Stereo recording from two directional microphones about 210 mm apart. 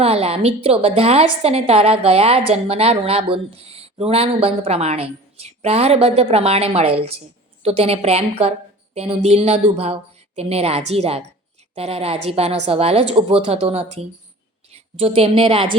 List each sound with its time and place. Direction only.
0.0 s a woman's voice: 30° right (ahead or behind)